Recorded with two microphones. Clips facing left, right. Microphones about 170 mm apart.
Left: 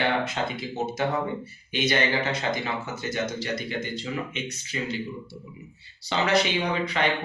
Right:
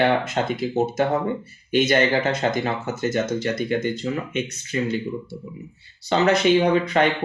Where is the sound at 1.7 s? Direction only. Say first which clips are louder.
Right 6 dB; 50° right (ahead or behind).